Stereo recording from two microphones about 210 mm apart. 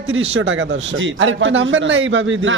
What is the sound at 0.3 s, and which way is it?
A man's voice, 65° right (ahead or behind).